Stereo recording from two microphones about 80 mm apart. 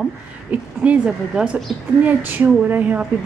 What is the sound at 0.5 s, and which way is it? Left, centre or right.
A woman's voice, centre.